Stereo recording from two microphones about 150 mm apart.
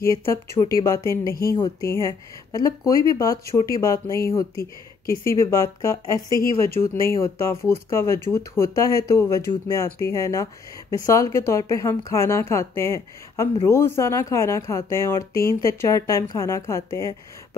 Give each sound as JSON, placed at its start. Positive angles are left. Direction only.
{"t": 0.0, "sound": "a woman's voice", "side_deg": 20}